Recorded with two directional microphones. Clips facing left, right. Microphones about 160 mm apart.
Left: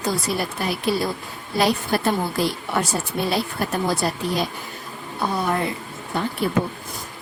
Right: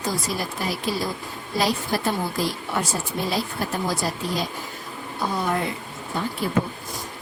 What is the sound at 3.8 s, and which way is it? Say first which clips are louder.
Speech: left 3 dB; 65° left (ahead or behind).